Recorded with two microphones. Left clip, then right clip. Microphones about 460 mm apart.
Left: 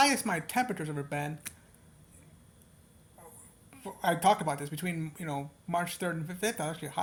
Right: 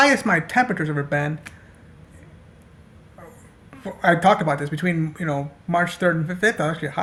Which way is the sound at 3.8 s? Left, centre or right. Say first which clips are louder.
Right 10 dB; left.